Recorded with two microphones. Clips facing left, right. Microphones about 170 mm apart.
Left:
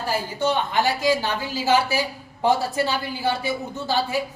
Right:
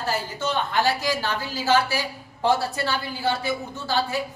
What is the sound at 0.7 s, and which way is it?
A woman's voice, 15° left (ahead or behind).